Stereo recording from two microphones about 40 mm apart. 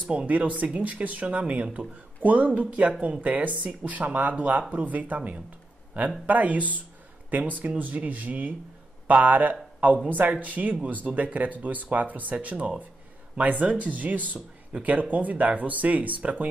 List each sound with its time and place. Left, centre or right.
0.1 s speech: right
1.2 s speech: right
13.4 s speech: right